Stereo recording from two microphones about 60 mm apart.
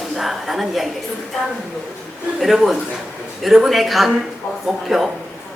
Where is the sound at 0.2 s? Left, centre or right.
Centre.